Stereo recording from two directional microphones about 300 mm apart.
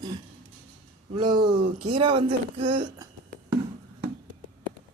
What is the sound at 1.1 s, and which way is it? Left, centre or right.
Speech, centre.